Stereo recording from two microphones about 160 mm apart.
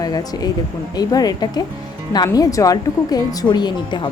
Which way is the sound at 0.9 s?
25° left (ahead or behind).